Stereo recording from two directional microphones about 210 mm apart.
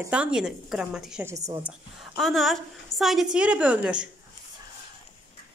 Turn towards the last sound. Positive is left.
turn(degrees=-5)  # may be behind; listen again after turning